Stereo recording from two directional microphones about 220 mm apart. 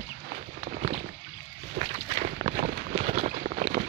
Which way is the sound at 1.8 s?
30° right (ahead or behind).